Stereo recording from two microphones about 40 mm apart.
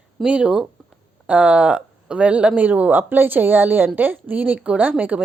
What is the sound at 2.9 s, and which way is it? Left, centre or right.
A woman's voice, right.